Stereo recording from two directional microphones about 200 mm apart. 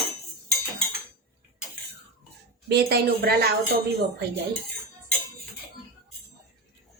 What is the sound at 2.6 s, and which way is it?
Speech, 55° right (ahead or behind).